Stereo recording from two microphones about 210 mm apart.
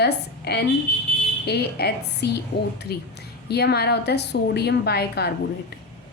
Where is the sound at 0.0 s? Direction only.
50° left (ahead or behind).